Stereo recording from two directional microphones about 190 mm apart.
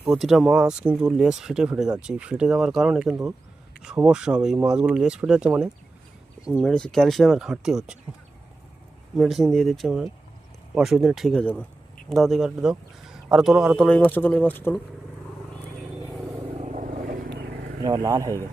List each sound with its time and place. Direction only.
0.0 s speech: centre (ahead or behind)
9.1 s speech: centre (ahead or behind)
15.5 s vehicle: 5° left (ahead or behind)
16.6 s vehicle: 40° right (ahead or behind); by 17.5 s 60° right (ahead or behind)
17.8 s speech: 15° right (ahead or behind)